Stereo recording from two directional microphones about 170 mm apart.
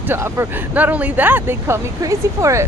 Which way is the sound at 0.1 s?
15° right (ahead or behind).